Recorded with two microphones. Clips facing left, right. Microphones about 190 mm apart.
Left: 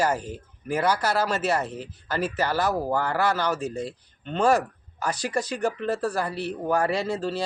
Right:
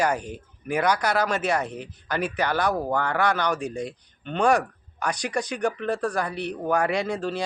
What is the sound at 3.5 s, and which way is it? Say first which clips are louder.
Speech: even; 15° right (ahead or behind).